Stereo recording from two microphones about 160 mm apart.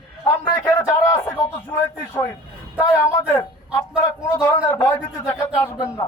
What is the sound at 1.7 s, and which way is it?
A man's voice, 15° left (ahead or behind).